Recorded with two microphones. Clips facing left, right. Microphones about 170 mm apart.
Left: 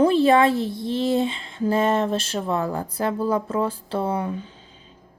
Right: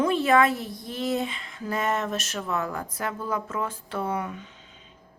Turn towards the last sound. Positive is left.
turn(degrees=30)  # may be behind; listen again after turning